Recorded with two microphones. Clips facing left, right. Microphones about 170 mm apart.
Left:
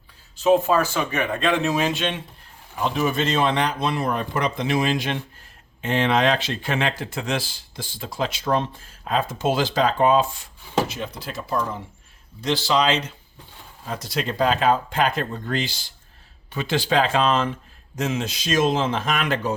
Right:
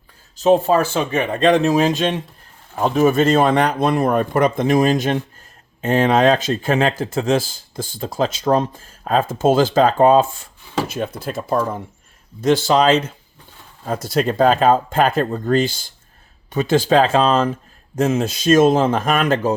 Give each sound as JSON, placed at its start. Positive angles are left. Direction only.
{"t": 0.3, "sound": "speech", "side_deg": -35}